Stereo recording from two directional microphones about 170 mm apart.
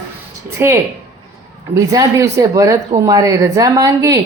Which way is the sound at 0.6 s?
15° right (ahead or behind).